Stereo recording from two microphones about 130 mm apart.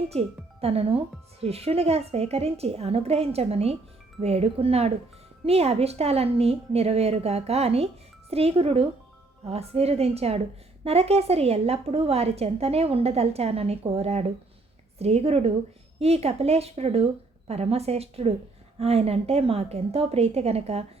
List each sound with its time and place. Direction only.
0.1 s speech: 50° right (ahead or behind)